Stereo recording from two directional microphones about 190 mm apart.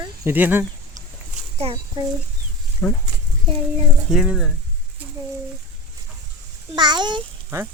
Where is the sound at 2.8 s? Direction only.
10° left (ahead or behind).